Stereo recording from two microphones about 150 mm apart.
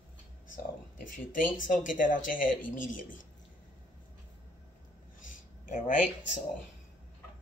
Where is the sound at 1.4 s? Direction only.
60° left (ahead or behind).